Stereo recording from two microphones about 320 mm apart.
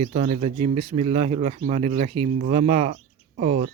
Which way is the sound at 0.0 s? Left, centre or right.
Centre.